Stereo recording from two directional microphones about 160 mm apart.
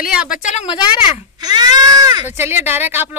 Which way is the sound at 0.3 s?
50° left (ahead or behind).